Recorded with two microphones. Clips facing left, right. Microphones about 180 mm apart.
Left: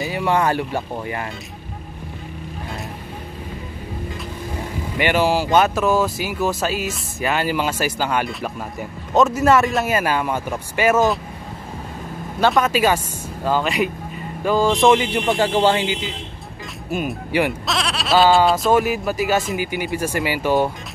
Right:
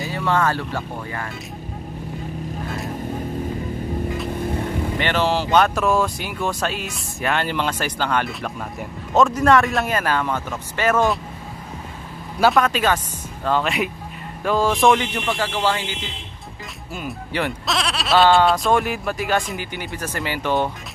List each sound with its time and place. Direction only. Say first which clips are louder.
0.0 s speech: left 2 dB; 15° left (ahead or behind)
4.9 s speech: left 4 dB; 10° left (ahead or behind)
12.4 s speech: even; centre (ahead or behind)
15.2 s speech: left 7 dB; 25° left (ahead or behind)
17.6 s speech: left 1 dB; centre (ahead or behind)